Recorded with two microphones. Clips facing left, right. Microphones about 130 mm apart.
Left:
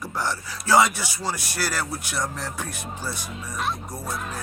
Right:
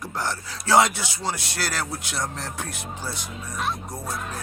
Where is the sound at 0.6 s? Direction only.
20° right (ahead or behind).